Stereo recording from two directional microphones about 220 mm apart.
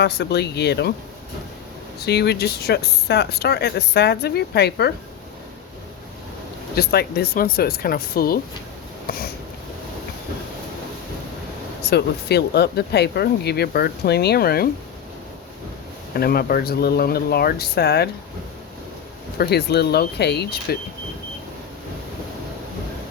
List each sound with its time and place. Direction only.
0.0 s speech: 50° left (ahead or behind)
2.0 s speech: 50° left (ahead or behind)
6.7 s speech: 45° left (ahead or behind)
9.0 s sniff: 45° left (ahead or behind)
11.8 s speech: 50° left (ahead or behind)
16.1 s speech: 45° left (ahead or behind)
19.4 s speech: 45° left (ahead or behind)